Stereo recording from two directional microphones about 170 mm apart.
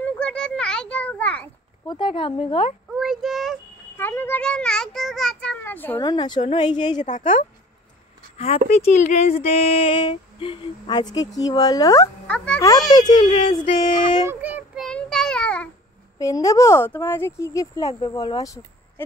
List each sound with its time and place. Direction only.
0.0 s a sound: 5° left (ahead or behind)
1.9 s a woman's voice: 30° left (ahead or behind)
2.9 s child singing: 5° right (ahead or behind)
3.9 s a child's voice: 10° left (ahead or behind)
6.0 s a woman's voice: 25° left (ahead or behind)
7.0 s speech: 45° left (ahead or behind)
8.4 s speech: 35° left (ahead or behind); by 12.1 s 20° left (ahead or behind)
12.3 s a child's voice: 5° left (ahead or behind)
12.9 s a woman's voice: 25° left (ahead or behind)
14.2 s speech: 10° right (ahead or behind)
14.8 s child singing: 5° left (ahead or behind)
16.2 s a woman's voice: 20° left (ahead or behind)